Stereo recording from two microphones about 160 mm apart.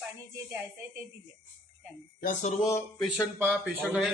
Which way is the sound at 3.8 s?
Centre (ahead or behind).